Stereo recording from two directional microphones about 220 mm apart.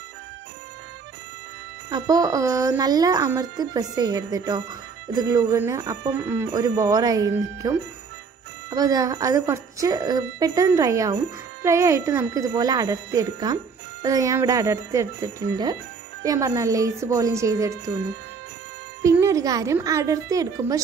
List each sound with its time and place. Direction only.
1.9 s speech: 15° right (ahead or behind)
19.0 s speech: 15° right (ahead or behind)